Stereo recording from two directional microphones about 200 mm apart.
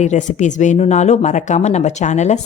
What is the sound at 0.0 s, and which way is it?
Speech, 35° left (ahead or behind).